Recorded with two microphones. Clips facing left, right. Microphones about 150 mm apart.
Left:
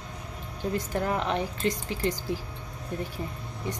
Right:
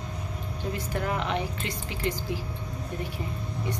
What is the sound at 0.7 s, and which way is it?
Speech, 40° left (ahead or behind).